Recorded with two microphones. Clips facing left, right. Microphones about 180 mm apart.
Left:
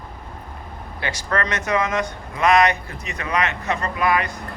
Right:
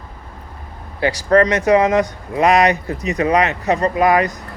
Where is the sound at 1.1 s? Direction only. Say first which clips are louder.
Right 11 dB; 35° right (ahead or behind).